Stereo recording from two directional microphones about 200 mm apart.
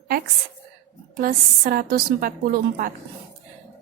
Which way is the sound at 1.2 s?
45° right (ahead or behind).